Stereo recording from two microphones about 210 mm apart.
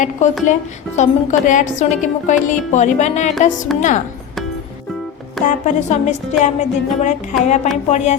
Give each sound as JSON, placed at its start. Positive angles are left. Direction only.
{"t": 0.2, "sound": "a woman's voice", "side_deg": 35}
{"t": 5.5, "sound": "a woman's voice", "side_deg": 35}